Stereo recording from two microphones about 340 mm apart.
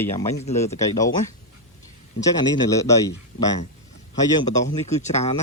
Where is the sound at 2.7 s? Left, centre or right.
Centre.